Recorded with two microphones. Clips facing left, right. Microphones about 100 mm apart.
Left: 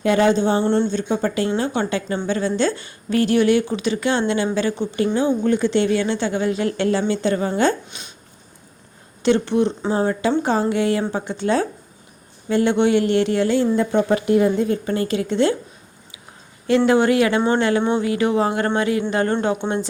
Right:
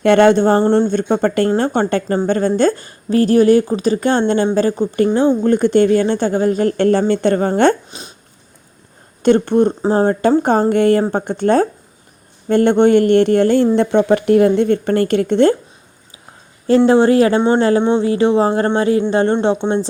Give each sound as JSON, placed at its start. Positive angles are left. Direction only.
{"t": 0.0, "sound": "a woman's voice", "side_deg": -65}
{"t": 7.9, "sound": "a woman's voice", "side_deg": -35}
{"t": 9.2, "sound": "speech", "side_deg": -50}
{"t": 16.6, "sound": "a woman's voice", "side_deg": -35}